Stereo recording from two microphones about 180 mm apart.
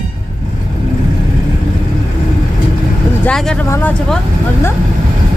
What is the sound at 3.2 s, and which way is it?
Speech, 5° left (ahead or behind).